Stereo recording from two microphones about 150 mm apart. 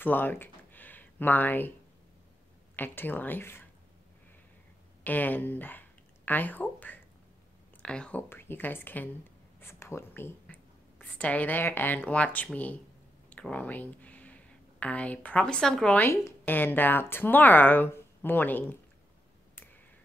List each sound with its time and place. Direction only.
0.0 s a sound: 15° left (ahead or behind)
2.7 s speech: 15° left (ahead or behind)
5.0 s speech: 10° left (ahead or behind)